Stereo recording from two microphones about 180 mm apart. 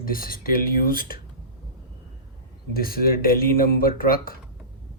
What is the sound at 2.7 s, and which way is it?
Speech, 55° left (ahead or behind).